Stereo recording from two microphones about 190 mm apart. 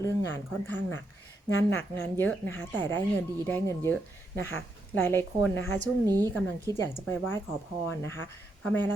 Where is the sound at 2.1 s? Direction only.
10° left (ahead or behind).